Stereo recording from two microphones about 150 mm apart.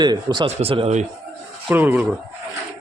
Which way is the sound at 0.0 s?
30° right (ahead or behind).